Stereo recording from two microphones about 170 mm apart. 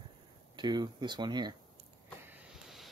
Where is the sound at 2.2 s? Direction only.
5° right (ahead or behind).